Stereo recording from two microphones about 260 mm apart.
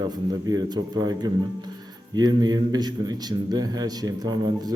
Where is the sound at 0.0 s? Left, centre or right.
Centre.